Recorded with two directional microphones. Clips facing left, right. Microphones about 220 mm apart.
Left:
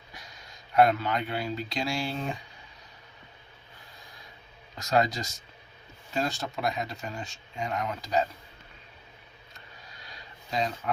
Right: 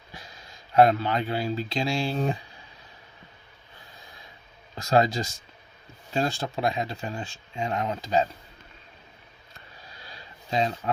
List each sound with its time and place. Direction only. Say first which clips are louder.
0.8 s speech: right 3 dB; 30° right (ahead or behind)
2.1 s speech: right 6 dB; 40° right (ahead or behind)
4.8 s speech: right 4 dB; 30° right (ahead or behind)
10.5 s speech: right 4 dB; 25° right (ahead or behind)